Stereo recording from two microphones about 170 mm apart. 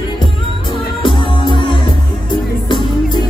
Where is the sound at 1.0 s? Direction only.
30° left (ahead or behind).